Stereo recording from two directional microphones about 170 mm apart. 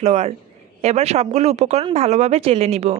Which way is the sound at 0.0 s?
40° right (ahead or behind).